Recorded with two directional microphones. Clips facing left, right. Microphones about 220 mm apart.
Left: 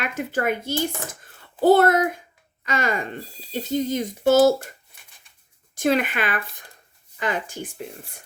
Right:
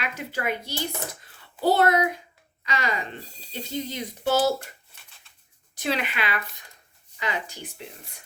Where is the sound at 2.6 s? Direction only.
50° left (ahead or behind).